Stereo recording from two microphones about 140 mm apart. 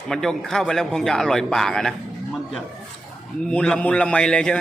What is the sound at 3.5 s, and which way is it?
A man's voice, 5° left (ahead or behind).